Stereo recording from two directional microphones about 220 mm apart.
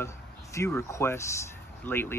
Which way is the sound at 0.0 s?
10° left (ahead or behind).